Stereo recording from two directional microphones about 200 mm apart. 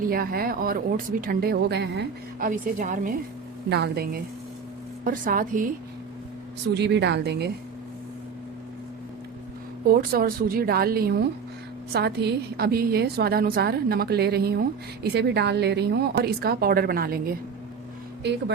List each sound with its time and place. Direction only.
0.0 s a woman's voice: 45° right (ahead or behind)
2.5 s a woman's voice: 40° right (ahead or behind)
3.7 s a woman's voice: 55° right (ahead or behind)
6.7 s a woman's voice: 60° right (ahead or behind)
9.8 s a woman's voice: 50° right (ahead or behind)
18.2 s speech: 60° right (ahead or behind)